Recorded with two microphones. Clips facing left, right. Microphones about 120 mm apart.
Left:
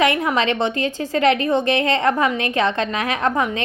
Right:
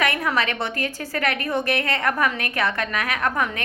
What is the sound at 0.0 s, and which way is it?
A woman's voice, 20° left (ahead or behind).